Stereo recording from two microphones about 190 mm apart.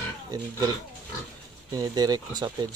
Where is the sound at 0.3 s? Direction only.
20° right (ahead or behind).